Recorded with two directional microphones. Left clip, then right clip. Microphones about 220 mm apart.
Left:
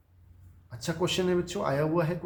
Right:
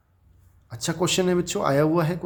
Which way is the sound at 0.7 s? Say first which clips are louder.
Right 5 dB; 50° right (ahead or behind).